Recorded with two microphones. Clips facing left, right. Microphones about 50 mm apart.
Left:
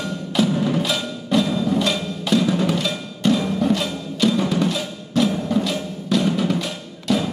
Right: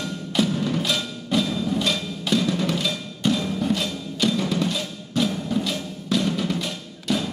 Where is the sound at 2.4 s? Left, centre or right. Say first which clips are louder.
Left 4 dB; centre.